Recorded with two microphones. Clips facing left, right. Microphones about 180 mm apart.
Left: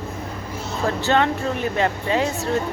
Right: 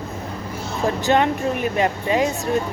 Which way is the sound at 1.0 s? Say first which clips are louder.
Right 2 dB; 15° right (ahead or behind).